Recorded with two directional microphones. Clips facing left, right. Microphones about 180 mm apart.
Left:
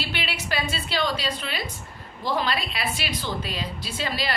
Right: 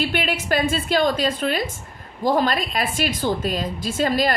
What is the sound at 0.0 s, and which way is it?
A woman's voice, 50° right (ahead or behind).